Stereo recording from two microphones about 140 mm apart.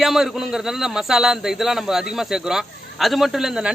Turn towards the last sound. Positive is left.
turn(degrees=-5)  # may be behind; listen again after turning